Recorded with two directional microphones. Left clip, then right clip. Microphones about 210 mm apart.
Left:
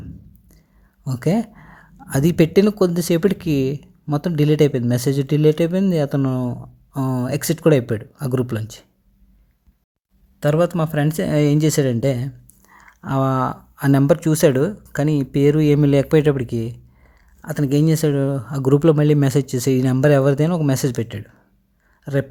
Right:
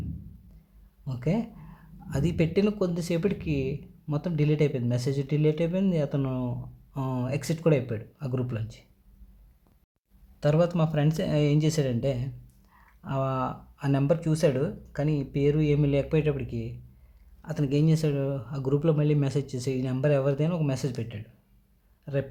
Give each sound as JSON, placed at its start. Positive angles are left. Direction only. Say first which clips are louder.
{"t": 1.0, "sound": "speech", "louder": "left 9 dB", "side_deg": 40}
{"t": 10.4, "sound": "speech", "louder": "left 7 dB", "side_deg": 35}